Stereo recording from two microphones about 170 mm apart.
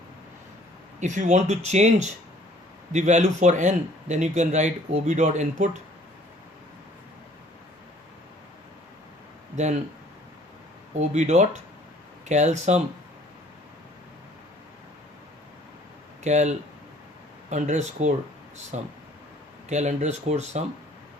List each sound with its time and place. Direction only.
0.9 s speech: 45° right (ahead or behind)
10.9 s speech: 45° right (ahead or behind)
16.2 s speech: 45° right (ahead or behind)